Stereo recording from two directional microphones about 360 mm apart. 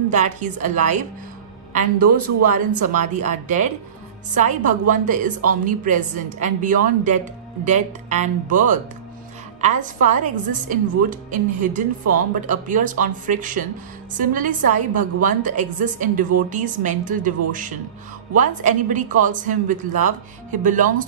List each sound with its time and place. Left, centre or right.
0.1 s a woman's voice: centre
2.4 s a woman's voice: right